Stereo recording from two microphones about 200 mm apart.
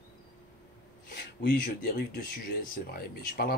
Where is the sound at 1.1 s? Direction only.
50° left (ahead or behind).